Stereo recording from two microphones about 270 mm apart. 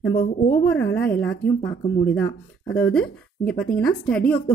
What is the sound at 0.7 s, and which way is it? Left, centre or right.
Speech, left.